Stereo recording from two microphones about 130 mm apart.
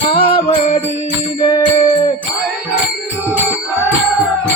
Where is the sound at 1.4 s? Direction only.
35° left (ahead or behind).